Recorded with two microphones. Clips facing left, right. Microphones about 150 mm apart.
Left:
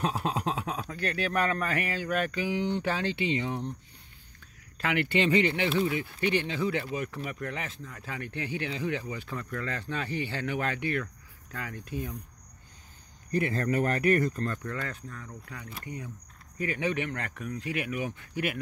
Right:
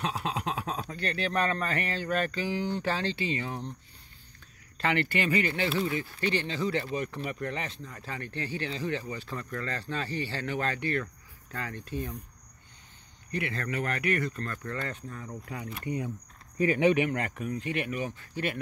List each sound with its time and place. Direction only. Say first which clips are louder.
0.2 s a sound: left 2 dB; 40° left (ahead or behind)
0.9 s speech: left 1 dB; 10° left (ahead or behind)
4.7 s speech: right 1 dB; 5° left (ahead or behind)
5.0 s speech: left 3 dB; 20° left (ahead or behind)
13.3 s speech: left 5 dB; 40° left (ahead or behind)
14.6 s speech: even; centre (ahead or behind)
15.0 s speech: right 4 dB; 20° right (ahead or behind); by 18.6 s 10° left (ahead or behind)